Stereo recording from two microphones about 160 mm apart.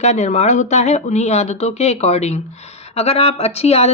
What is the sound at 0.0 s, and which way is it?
A woman's voice, 45° left (ahead or behind).